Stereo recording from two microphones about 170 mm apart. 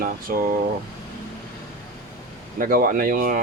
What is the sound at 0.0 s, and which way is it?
Speech, 55° right (ahead or behind).